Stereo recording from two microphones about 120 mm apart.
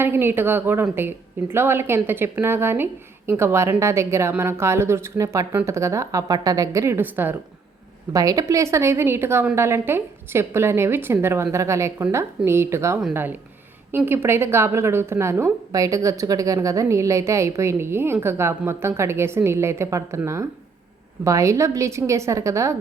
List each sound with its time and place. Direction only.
0.0 s a woman's voice: 20° right (ahead or behind)
8.1 s a woman's voice: 30° right (ahead or behind)